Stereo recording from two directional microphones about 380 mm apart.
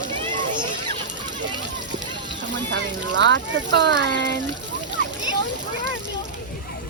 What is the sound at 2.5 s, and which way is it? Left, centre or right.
Speech, right.